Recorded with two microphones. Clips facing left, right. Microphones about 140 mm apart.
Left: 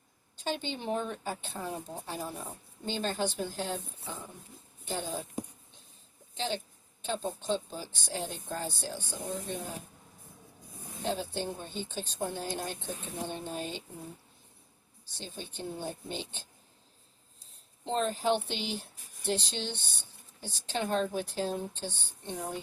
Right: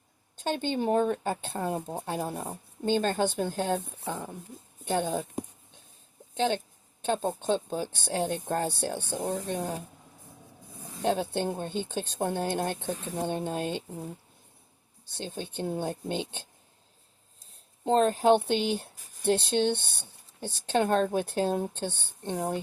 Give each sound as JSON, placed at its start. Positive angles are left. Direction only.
{"t": 0.4, "sound": "speech", "side_deg": -50}
{"t": 11.0, "sound": "speech", "side_deg": -60}
{"t": 15.2, "sound": "speech", "side_deg": -50}
{"t": 17.8, "sound": "speech", "side_deg": -50}